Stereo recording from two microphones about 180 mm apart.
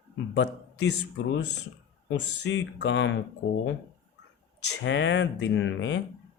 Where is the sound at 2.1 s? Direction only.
75° left (ahead or behind).